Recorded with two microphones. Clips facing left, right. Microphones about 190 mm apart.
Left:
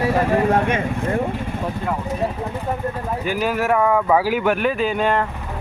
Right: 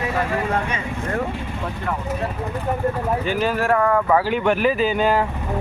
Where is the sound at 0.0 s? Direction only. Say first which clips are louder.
Left 5 dB; 40° left (ahead or behind).